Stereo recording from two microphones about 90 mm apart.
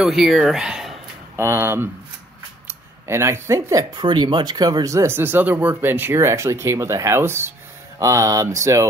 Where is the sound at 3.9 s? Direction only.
55° right (ahead or behind).